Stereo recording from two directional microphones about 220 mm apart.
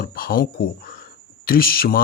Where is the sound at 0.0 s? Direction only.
40° left (ahead or behind).